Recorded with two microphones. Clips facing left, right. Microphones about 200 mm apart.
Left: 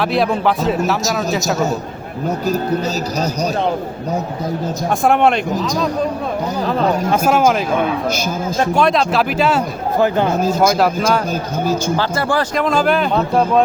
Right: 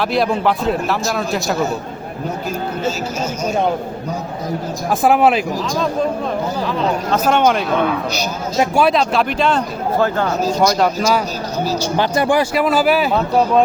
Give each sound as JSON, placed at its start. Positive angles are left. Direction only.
{"t": 0.0, "sound": "a man's voice", "side_deg": 0}
{"t": 2.5, "sound": "speech", "side_deg": 40}
{"t": 4.9, "sound": "a man's voice", "side_deg": -5}
{"t": 7.1, "sound": "a man's voice", "side_deg": 5}
{"t": 8.7, "sound": "a man's voice", "side_deg": -5}
{"t": 11.9, "sound": "a man's voice", "side_deg": -15}